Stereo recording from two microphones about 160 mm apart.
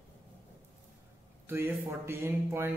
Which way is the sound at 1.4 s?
15° right (ahead or behind).